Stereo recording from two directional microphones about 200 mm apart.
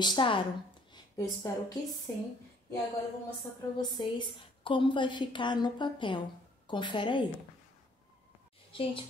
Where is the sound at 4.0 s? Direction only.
25° left (ahead or behind).